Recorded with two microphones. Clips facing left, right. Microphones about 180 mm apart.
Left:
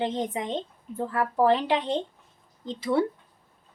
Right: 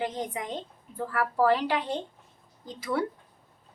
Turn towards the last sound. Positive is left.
turn(degrees=25)  # may be behind; listen again after turning